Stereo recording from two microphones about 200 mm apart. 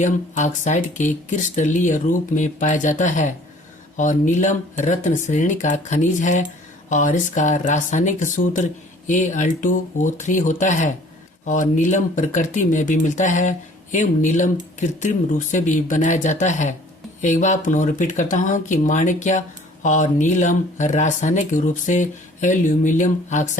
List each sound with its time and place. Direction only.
0.0 s speech: 40° left (ahead or behind)